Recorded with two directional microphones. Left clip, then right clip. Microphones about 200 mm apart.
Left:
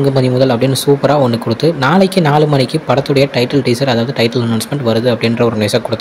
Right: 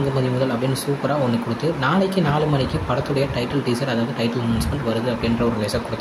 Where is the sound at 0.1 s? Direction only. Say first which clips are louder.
Left 10 dB; 35° left (ahead or behind).